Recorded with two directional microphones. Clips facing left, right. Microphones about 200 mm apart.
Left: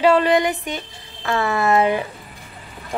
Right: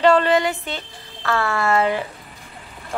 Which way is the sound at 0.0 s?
10° left (ahead or behind).